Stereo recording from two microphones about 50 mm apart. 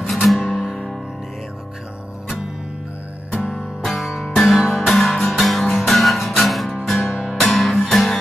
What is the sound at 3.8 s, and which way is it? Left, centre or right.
Music, centre.